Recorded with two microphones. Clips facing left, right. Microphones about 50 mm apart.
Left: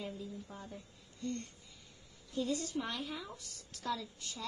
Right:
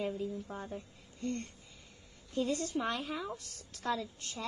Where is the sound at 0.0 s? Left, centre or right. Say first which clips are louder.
Right 7 dB; right.